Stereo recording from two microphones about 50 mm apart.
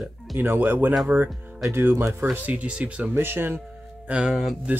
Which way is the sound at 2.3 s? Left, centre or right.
Right.